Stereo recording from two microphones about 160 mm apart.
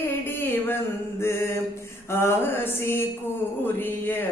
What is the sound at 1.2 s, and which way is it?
Mantra, 15° left (ahead or behind).